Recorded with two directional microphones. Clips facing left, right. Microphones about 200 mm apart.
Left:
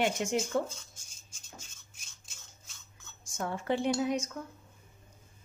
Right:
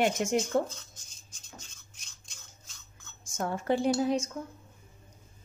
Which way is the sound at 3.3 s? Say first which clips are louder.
Right 3 dB; 45° right (ahead or behind).